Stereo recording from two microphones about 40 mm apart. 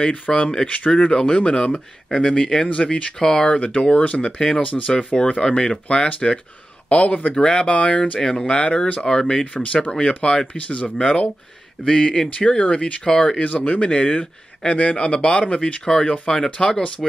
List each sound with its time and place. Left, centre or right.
0.0 s speech: left
1.1 s speech: left
3.2 s speech: centre; by 4.9 s left
4.9 s speech: centre
8.2 s speech: centre
9.0 s speech: centre
10.5 s speech: left
13.0 s speech: centre
13.4 s speech: left